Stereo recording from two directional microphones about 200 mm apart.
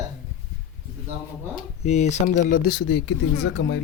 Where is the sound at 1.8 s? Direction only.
35° left (ahead or behind); by 3.8 s 60° left (ahead or behind).